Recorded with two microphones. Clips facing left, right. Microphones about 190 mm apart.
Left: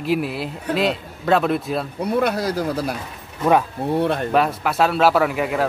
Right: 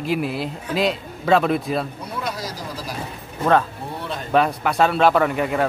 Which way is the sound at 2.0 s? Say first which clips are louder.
Left 9 dB; 60° left (ahead or behind).